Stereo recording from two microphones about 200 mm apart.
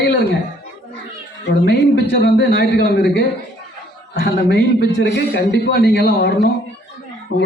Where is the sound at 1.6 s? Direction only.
60° left (ahead or behind).